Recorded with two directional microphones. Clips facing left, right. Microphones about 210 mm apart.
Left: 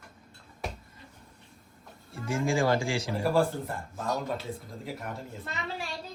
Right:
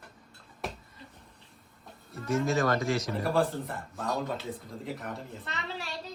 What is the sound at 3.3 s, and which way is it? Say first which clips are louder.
Speech: left 1 dB; centre (ahead or behind).